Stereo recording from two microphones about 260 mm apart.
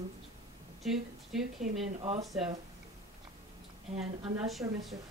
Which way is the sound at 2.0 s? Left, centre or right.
Right.